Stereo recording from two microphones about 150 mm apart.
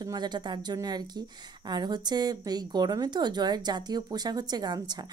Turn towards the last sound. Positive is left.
turn(degrees=-30)  # may be behind; listen again after turning